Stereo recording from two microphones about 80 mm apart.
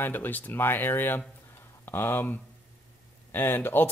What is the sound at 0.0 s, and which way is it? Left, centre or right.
A man's voice, left.